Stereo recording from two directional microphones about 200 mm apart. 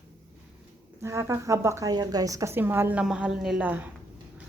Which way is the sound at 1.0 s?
15° right (ahead or behind).